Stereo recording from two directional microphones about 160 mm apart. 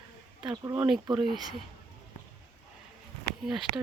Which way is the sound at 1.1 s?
30° right (ahead or behind).